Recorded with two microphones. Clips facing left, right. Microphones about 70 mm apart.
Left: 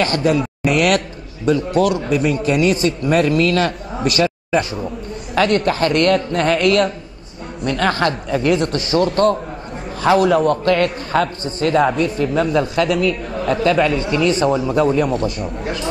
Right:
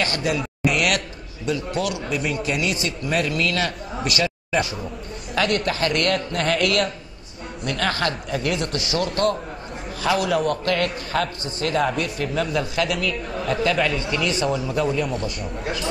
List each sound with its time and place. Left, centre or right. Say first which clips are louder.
0.0 s a man's voice: left 7 dB; left
5.3 s a man's voice: left 6 dB; left
15.4 s speech: left 4 dB; centre